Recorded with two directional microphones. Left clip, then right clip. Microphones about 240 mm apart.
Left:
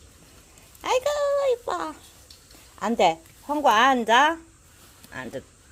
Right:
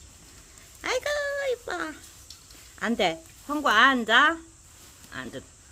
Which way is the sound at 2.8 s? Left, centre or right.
Centre.